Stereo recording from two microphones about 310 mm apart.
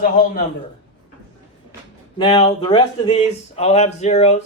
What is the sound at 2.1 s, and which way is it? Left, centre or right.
Speech, centre.